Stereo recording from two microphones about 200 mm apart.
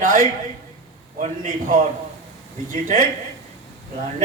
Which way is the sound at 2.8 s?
40° right (ahead or behind).